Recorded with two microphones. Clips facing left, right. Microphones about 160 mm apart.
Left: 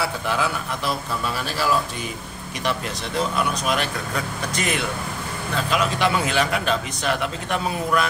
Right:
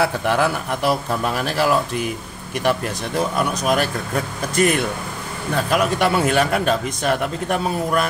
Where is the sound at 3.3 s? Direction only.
45° right (ahead or behind).